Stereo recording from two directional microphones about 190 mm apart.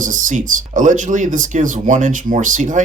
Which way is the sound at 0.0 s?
40° right (ahead or behind).